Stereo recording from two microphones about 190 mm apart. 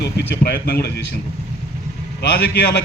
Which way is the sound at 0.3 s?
60° left (ahead or behind).